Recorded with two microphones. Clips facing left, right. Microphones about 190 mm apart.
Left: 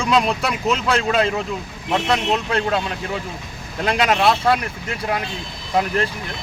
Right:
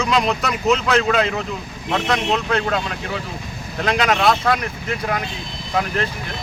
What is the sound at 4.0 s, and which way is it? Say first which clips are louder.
Speech: left 1 dB; 10° left (ahead or behind).